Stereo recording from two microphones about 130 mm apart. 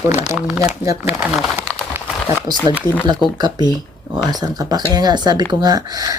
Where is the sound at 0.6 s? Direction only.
25° right (ahead or behind).